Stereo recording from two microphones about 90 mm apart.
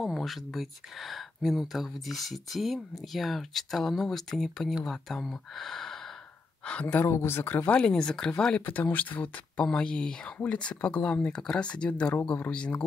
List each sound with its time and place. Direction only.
0.0 s speech: centre (ahead or behind)